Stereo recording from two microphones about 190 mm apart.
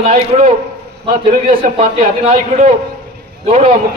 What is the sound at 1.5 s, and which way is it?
Speech, 50° right (ahead or behind).